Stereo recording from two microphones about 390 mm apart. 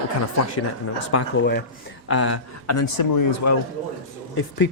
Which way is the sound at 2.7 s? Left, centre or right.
Left.